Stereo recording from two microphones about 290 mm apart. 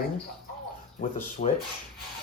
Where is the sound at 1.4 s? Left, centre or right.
Left.